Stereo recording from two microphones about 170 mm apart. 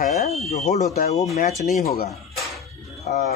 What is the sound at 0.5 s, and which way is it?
Speech, 40° left (ahead or behind).